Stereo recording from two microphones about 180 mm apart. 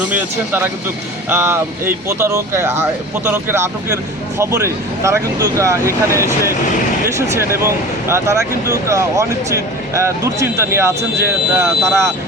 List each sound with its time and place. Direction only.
0.0 s speech: 10° right (ahead or behind)